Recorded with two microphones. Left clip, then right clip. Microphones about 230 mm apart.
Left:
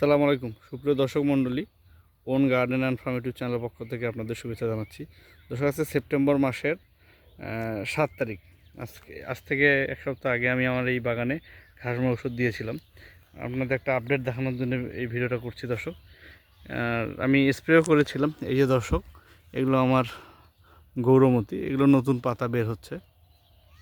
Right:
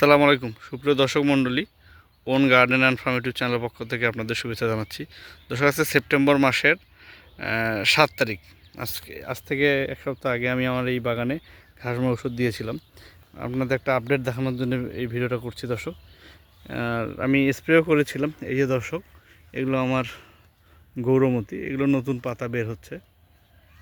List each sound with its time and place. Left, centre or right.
0.0 s speech: centre